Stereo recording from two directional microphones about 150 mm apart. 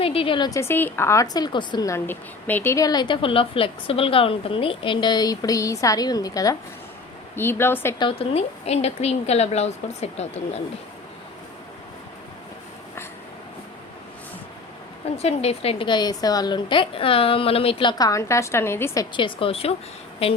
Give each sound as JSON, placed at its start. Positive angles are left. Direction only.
{"t": 0.0, "sound": "a woman's voice", "side_deg": 40}
{"t": 0.6, "sound": "a woman's voice", "side_deg": 15}
{"t": 7.9, "sound": "a woman's voice", "side_deg": 35}
{"t": 15.2, "sound": "a woman's voice", "side_deg": 45}
{"t": 19.1, "sound": "a woman's voice", "side_deg": 35}